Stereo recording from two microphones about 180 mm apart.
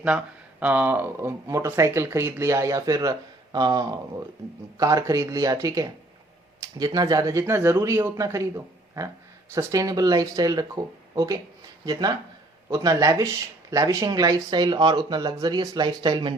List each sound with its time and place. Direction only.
0.6 s speech: 10° right (ahead or behind); by 16.3 s 25° right (ahead or behind)